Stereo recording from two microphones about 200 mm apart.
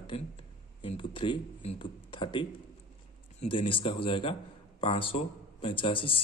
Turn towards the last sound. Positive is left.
turn(degrees=25)  # may be behind; listen again after turning